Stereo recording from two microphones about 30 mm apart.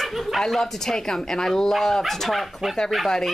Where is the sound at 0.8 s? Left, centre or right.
Centre.